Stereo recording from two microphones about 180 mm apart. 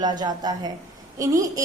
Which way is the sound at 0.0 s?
25° right (ahead or behind).